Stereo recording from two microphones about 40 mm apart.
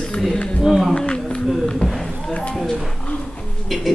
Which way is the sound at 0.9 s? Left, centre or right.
Left.